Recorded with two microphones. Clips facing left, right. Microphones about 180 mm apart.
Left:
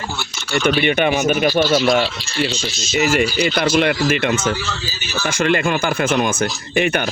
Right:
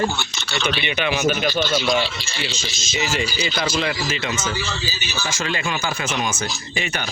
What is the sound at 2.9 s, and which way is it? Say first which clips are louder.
Speech: left 7 dB; 60° left (ahead or behind).